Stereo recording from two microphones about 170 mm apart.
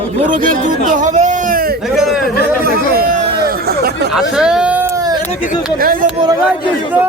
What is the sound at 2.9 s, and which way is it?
Chatter, 60° right (ahead or behind).